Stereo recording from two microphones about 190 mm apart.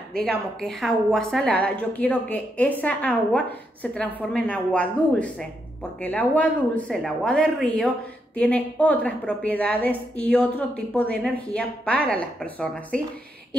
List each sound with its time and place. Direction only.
0.2 s a woman's voice: 5° left (ahead or behind)